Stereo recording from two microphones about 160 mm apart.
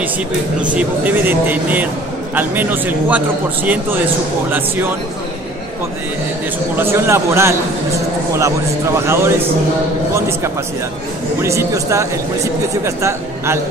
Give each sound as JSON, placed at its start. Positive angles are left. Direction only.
{"t": 0.6, "sound": "speech", "side_deg": -10}
{"t": 6.8, "sound": "a woman's voice", "side_deg": -15}